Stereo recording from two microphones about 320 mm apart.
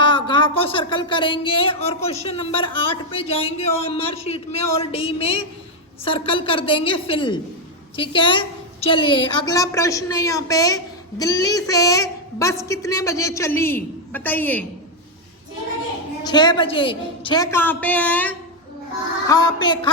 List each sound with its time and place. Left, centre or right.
0.0 s speech: centre
16.2 s a woman's voice: centre